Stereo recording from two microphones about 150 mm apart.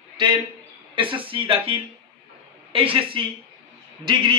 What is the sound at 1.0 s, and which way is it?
A man's voice, 35° right (ahead or behind).